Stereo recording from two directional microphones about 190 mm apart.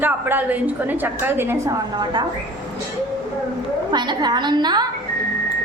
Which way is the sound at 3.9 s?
25° right (ahead or behind).